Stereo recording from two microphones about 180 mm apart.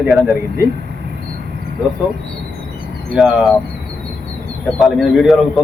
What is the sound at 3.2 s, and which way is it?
Speech, centre (ahead or behind).